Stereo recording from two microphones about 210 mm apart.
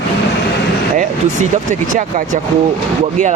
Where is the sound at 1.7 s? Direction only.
35° right (ahead or behind).